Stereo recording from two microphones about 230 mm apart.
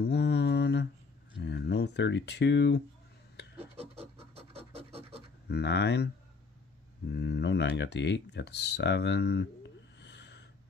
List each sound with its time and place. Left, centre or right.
0.0 s mantra: left
1.4 s a sound: left
3.5 s pant: right
5.5 s speech: left
7.1 s speech: left